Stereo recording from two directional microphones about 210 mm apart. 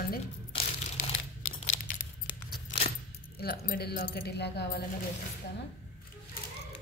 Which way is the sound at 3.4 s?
45° left (ahead or behind).